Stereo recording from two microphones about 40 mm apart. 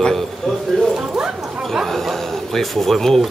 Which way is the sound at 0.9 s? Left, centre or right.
Centre.